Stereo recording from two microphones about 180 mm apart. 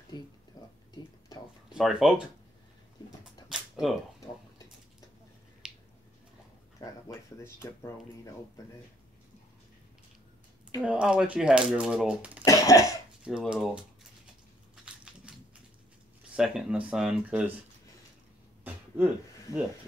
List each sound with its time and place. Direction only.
0.1 s a sound: 25° left (ahead or behind)
1.7 s speech: centre (ahead or behind)
5.6 s a sound: 5° right (ahead or behind)
6.8 s speech: 15° left (ahead or behind)
10.8 s speech: 5° right (ahead or behind)
12.4 s cough: 20° left (ahead or behind)
13.2 s speech: 5° right (ahead or behind)
16.3 s speech: 5° right (ahead or behind)
18.9 s speech: 5° right (ahead or behind)